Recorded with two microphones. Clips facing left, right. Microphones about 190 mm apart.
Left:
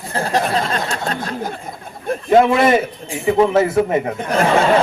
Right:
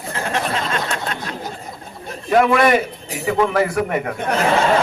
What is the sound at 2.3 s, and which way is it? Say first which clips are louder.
Speech: left 2 dB; 25° left (ahead or behind).